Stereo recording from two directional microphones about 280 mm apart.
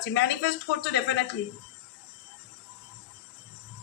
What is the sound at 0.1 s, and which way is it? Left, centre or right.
Speech, left.